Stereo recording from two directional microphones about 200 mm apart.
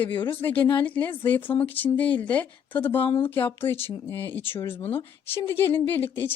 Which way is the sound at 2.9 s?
25° left (ahead or behind).